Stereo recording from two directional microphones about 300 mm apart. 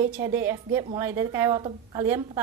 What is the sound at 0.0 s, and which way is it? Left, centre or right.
A woman's voice, centre.